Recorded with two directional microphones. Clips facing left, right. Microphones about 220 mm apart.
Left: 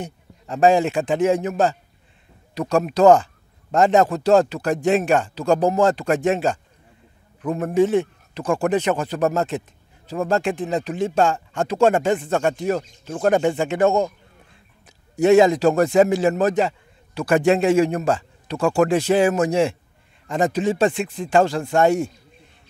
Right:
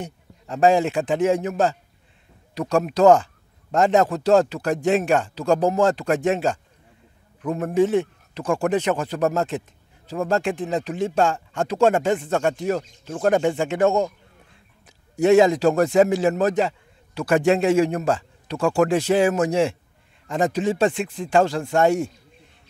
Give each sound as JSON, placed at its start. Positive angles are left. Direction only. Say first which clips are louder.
{"t": 0.5, "sound": "speech", "louder": "left 1 dB", "side_deg": 10}
{"t": 5.4, "sound": "speech", "louder": "left 1 dB", "side_deg": 25}
{"t": 7.4, "sound": "speech", "louder": "left 1 dB", "side_deg": 25}
{"t": 7.7, "sound": "speech", "louder": "left 1 dB", "side_deg": 15}
{"t": 15.2, "sound": "speech", "louder": "left 1 dB", "side_deg": 10}